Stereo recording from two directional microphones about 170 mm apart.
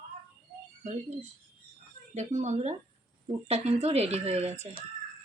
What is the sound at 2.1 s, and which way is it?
Speech, 45° right (ahead or behind).